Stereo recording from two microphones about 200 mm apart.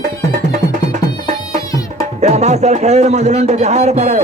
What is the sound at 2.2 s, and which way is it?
A man's voice, 35° right (ahead or behind).